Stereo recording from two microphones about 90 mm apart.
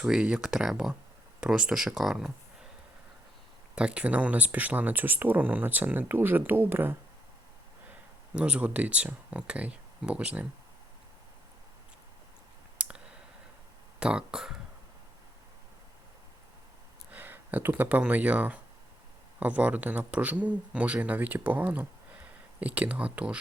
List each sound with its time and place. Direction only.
0.0 s speech: 10° right (ahead or behind)
3.8 s speech: 10° right (ahead or behind)
8.3 s speech: 15° right (ahead or behind)
12.8 s clicking: 15° right (ahead or behind)
14.0 s speech: 10° right (ahead or behind)
17.1 s speech: 20° right (ahead or behind)